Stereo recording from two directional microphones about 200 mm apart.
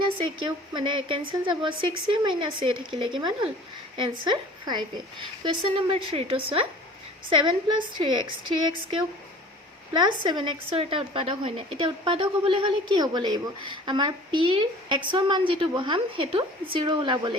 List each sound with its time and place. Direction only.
0.7 s a woman's voice: 25° right (ahead or behind)